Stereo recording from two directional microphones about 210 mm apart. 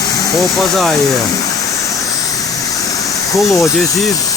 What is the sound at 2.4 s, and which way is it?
Vehicle, 15° left (ahead or behind).